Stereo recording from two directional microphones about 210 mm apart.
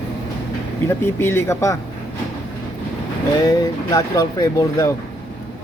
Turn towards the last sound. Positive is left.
turn(degrees=15)  # may be behind; listen again after turning